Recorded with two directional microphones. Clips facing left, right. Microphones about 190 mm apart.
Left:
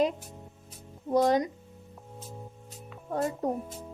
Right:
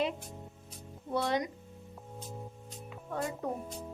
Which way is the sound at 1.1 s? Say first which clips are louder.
Left 7 dB; 40° left (ahead or behind).